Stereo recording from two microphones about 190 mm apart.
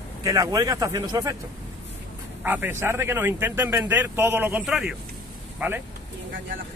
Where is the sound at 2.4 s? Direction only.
10° right (ahead or behind).